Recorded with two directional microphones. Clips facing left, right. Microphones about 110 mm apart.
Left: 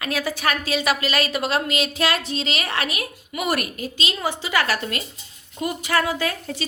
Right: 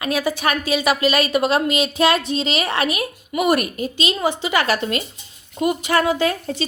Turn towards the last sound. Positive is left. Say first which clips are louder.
# right 5 dB
turn(degrees=-25)  # may be behind; listen again after turning